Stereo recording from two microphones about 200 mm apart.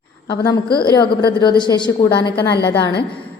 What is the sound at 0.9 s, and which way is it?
A woman's voice, 20° left (ahead or behind).